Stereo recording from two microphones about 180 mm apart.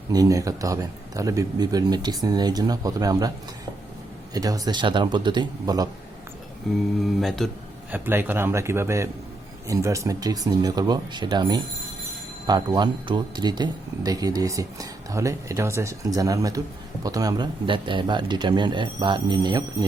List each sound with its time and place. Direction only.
0.1 s speech: 20° right (ahead or behind)
4.4 s speech: 20° right (ahead or behind)
7.0 s speech: centre (ahead or behind)
7.9 s speech: 10° right (ahead or behind)